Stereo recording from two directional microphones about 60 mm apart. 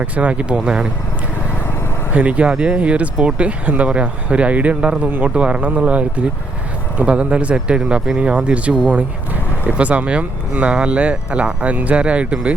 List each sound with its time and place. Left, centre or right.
0.0 s speech: right
2.1 s speech: right